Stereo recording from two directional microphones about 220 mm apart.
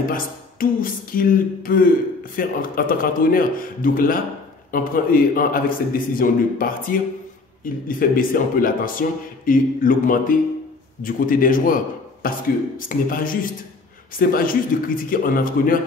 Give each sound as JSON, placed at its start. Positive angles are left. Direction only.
{"t": 0.1, "sound": "a man's voice", "side_deg": 40}